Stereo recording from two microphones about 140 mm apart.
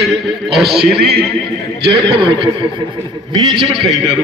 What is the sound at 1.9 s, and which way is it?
A man's voice, 35° right (ahead or behind).